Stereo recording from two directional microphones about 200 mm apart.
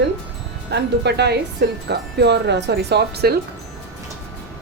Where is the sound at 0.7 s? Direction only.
55° right (ahead or behind).